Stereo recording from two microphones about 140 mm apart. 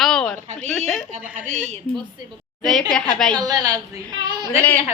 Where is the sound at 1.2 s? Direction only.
10° right (ahead or behind).